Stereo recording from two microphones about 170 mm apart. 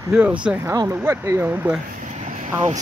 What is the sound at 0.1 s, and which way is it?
Speech, 5° right (ahead or behind).